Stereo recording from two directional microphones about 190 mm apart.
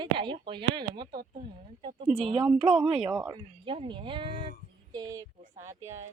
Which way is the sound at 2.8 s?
30° right (ahead or behind).